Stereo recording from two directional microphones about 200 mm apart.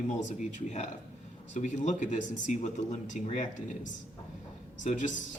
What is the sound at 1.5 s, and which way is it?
Speech, 35° left (ahead or behind).